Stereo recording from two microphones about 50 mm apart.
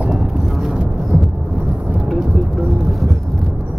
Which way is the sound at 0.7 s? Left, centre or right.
Centre.